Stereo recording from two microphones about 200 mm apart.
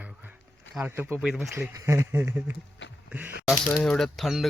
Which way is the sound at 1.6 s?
10° right (ahead or behind).